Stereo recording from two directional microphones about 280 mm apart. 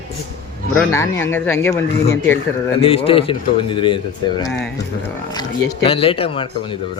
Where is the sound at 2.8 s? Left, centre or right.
Centre.